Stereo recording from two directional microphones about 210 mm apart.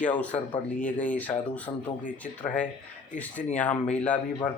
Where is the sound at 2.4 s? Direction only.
40° left (ahead or behind).